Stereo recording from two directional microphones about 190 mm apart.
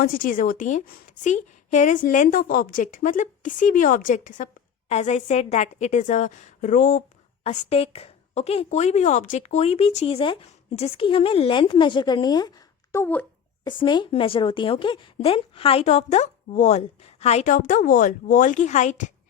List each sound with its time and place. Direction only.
0.0 s a woman's voice: 50° left (ahead or behind)
7.4 s speech: 30° left (ahead or behind); by 13.2 s 10° left (ahead or behind)
13.8 s speech: 25° left (ahead or behind); by 19.1 s 40° left (ahead or behind)